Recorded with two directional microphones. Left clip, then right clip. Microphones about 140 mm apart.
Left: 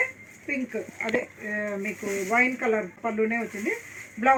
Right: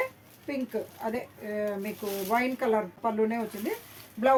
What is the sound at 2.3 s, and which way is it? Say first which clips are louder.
Speech: left 3 dB; 30° right (ahead or behind).